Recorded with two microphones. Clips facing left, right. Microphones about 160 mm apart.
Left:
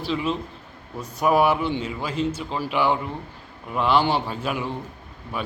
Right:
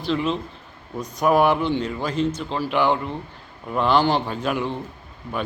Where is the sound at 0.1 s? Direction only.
5° left (ahead or behind).